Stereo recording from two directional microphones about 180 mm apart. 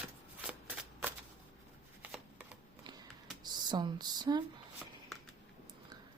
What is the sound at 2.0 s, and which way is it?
Shuffling cards, 5° right (ahead or behind).